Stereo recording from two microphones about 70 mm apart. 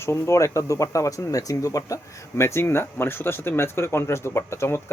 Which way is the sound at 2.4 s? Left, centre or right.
Left.